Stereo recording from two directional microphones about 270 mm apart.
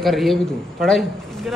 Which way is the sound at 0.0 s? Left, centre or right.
Centre.